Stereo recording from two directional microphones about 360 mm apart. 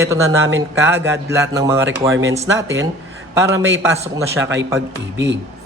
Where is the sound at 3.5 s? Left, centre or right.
Right.